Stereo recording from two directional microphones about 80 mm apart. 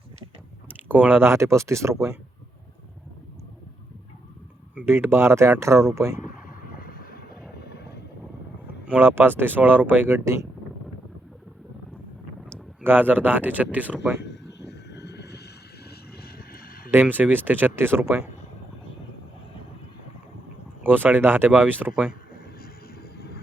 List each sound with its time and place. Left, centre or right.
0.9 s speech: right
1.3 s speech: right
4.9 s speech: right
8.9 s speech: right
12.8 s speech: right
16.9 s speech: right
20.8 s speech: right